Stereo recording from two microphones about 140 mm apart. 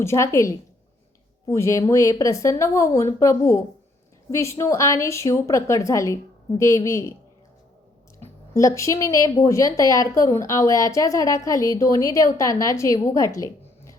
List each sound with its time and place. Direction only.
0.0 s a woman's voice: 20° left (ahead or behind)
8.5 s a woman's voice: 20° left (ahead or behind)